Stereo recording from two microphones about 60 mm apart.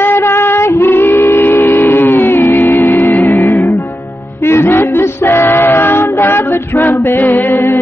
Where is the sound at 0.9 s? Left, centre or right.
Left.